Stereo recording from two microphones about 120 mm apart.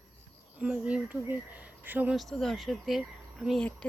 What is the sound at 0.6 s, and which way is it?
Speech, 10° right (ahead or behind).